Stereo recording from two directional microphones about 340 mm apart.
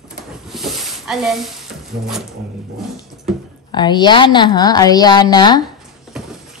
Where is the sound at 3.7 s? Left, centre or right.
Centre.